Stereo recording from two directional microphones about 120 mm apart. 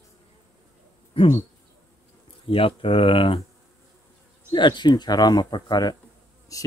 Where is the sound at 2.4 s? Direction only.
50° left (ahead or behind).